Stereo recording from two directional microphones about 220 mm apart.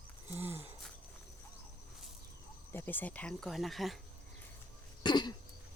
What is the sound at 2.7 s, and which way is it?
Speech, 10° left (ahead or behind).